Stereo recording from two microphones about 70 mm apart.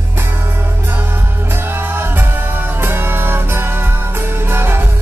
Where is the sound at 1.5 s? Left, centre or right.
Right.